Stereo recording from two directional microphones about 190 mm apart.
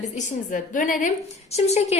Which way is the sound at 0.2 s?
40° left (ahead or behind).